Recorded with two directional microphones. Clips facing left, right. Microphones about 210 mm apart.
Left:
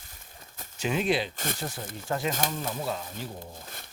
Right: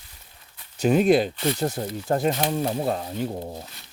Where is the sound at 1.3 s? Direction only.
45° left (ahead or behind).